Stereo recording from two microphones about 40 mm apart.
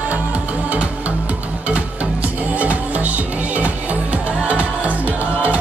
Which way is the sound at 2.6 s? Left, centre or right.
Right.